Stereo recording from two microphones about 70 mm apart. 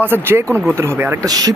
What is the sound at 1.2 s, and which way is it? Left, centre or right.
Speech, right.